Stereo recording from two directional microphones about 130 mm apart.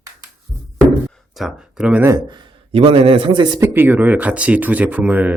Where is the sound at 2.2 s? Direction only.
35° right (ahead or behind).